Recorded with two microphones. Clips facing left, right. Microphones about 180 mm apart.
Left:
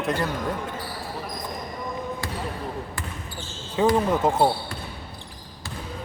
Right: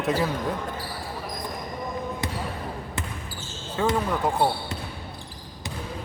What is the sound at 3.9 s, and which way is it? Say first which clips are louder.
Speech: left 3 dB; 20° left (ahead or behind).